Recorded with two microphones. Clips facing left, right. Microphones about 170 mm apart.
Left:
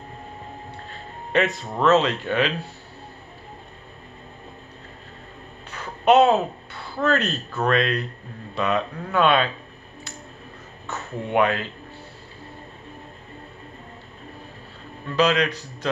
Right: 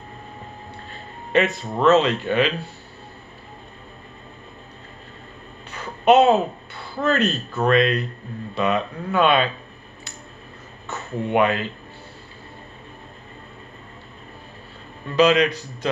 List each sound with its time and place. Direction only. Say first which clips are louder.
1.3 s speech: right 2 dB; 5° right (ahead or behind)
5.7 s a sound: right 2 dB; 5° right (ahead or behind)
7.0 s speech: right 2 dB; 5° right (ahead or behind)
10.9 s speech: right 3 dB; 5° right (ahead or behind)
15.0 s speech: right 4 dB; 5° right (ahead or behind)